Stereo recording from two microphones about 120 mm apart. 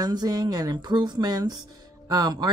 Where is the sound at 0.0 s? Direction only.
35° right (ahead or behind).